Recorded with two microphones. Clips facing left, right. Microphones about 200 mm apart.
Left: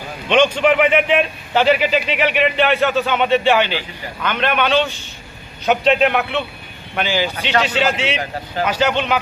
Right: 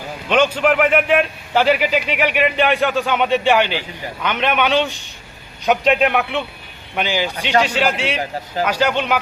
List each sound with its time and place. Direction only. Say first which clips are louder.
0.3 s a man's voice: left 1 dB; 5° right (ahead or behind)